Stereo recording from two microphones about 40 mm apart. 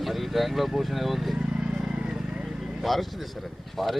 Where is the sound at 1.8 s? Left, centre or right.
Right.